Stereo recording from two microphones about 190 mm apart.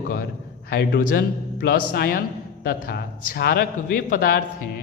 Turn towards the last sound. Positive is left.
turn(degrees=50)  # may be behind; listen again after turning